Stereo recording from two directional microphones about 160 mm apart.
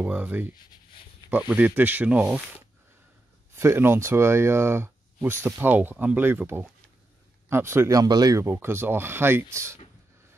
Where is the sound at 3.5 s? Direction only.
15° right (ahead or behind).